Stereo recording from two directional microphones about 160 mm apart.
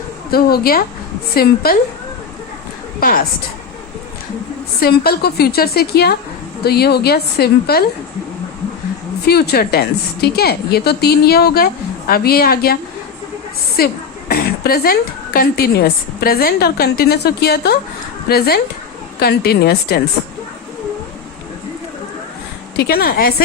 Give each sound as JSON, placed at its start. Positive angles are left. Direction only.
{"t": 0.3, "sound": "a woman's voice", "side_deg": 70}
{"t": 3.0, "sound": "a woman's voice", "side_deg": 65}
{"t": 4.8, "sound": "a woman's voice", "side_deg": 75}
{"t": 9.2, "sound": "a woman's voice", "side_deg": 80}
{"t": 13.7, "sound": "a woman's voice", "side_deg": 75}
{"t": 22.8, "sound": "a woman's voice", "side_deg": 75}